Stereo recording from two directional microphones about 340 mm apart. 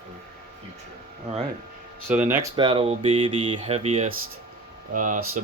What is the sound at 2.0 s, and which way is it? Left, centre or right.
Speech, centre.